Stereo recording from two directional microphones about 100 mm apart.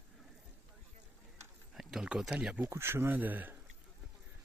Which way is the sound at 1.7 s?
5° right (ahead or behind).